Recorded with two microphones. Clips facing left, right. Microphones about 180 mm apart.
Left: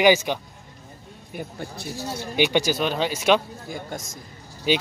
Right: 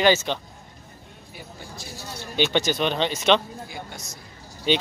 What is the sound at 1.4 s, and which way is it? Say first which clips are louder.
Speech: left 7 dB; 60° left (ahead or behind).